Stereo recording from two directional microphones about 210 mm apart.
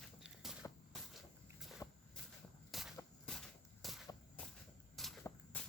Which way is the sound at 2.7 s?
Centre (ahead or behind).